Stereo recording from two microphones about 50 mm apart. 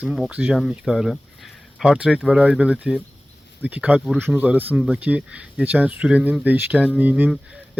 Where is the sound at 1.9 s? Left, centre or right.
Right.